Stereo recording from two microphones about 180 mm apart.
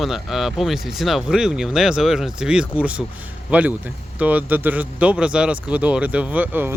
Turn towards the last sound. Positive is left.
turn(degrees=-10)  # may be behind; listen again after turning